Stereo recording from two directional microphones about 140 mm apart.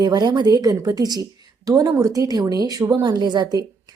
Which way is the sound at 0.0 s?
30° right (ahead or behind).